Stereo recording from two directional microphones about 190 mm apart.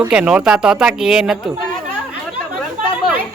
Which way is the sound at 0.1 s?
5° right (ahead or behind).